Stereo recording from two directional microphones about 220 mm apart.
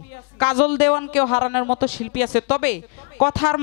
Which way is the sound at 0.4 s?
20° left (ahead or behind).